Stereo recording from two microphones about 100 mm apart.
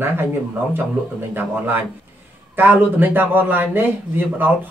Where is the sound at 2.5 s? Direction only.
20° right (ahead or behind).